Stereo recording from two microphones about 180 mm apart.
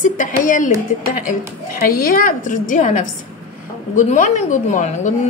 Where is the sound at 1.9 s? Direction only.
55° left (ahead or behind).